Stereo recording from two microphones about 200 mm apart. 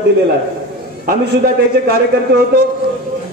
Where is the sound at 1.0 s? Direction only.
45° right (ahead or behind).